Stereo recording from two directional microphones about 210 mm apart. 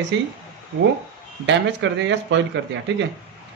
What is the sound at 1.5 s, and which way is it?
Speech, 60° right (ahead or behind).